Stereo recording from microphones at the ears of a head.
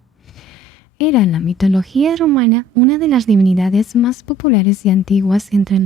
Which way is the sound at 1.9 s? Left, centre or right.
Right.